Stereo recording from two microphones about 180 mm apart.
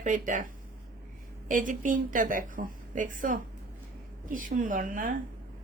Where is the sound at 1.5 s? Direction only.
45° right (ahead or behind).